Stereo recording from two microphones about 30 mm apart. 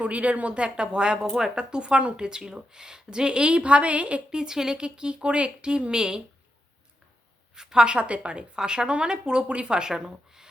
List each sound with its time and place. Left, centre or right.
0.0 s speech: right
2.1 s a woman's voice: right
4.3 s a woman's voice: right
4.9 s speech: right
7.5 s a woman's voice: right
7.9 s a woman's voice: right